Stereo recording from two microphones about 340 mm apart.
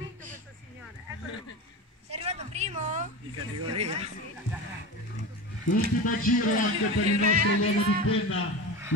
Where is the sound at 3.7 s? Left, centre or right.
Centre.